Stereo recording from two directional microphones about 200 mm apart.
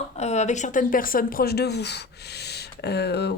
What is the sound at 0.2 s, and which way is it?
A woman's voice, 35° left (ahead or behind).